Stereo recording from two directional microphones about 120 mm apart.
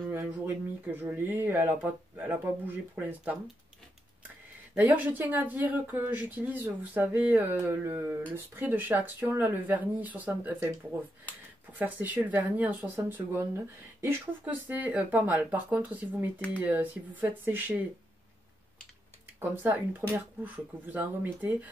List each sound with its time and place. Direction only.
0.1 s speech: 15° right (ahead or behind)
4.7 s speech: 15° right (ahead or behind)
19.5 s speech: 15° right (ahead or behind)